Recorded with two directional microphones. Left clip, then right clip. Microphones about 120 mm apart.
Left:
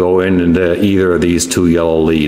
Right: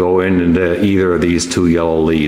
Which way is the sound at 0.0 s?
20° left (ahead or behind).